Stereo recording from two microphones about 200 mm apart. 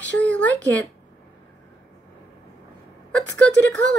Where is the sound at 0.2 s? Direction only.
5° left (ahead or behind).